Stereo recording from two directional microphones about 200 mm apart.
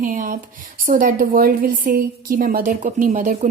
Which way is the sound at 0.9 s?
45° right (ahead or behind).